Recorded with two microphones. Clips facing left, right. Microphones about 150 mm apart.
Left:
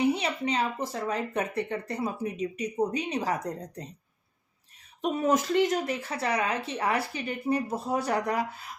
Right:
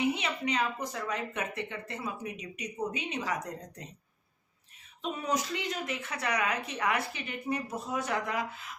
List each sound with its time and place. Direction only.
0.0 s speech: 35° left (ahead or behind)
5.0 s speech: 45° left (ahead or behind)